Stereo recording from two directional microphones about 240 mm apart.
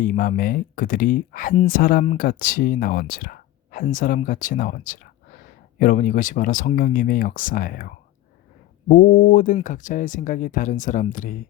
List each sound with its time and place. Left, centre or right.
0.0 s speech: left